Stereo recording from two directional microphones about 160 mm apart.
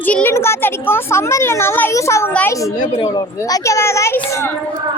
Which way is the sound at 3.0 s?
25° left (ahead or behind).